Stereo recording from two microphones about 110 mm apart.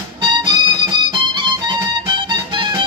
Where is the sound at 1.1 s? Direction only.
45° right (ahead or behind).